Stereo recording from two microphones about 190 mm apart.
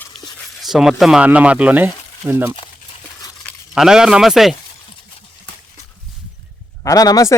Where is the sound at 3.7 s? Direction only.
5° right (ahead or behind).